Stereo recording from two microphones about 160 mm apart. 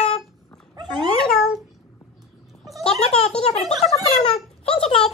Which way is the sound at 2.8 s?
40° left (ahead or behind).